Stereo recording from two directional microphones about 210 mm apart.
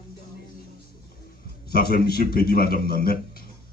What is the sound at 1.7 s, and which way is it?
A man's voice, 45° left (ahead or behind).